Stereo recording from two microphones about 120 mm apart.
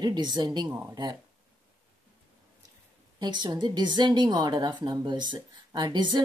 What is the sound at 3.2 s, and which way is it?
Speech, 35° right (ahead or behind).